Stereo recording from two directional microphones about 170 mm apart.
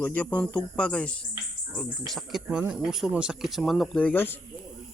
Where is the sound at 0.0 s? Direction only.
10° left (ahead or behind).